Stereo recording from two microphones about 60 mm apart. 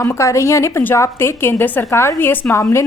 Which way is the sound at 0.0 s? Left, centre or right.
Left.